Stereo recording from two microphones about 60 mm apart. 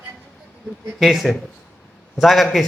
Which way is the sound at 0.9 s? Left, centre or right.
Centre.